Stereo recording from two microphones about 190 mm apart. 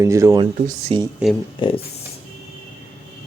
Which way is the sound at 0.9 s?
30° right (ahead or behind).